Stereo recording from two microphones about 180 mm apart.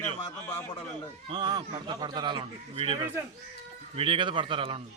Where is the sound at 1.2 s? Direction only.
25° right (ahead or behind).